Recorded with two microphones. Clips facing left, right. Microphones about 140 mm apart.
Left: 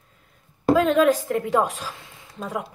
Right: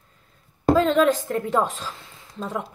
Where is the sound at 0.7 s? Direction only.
10° left (ahead or behind).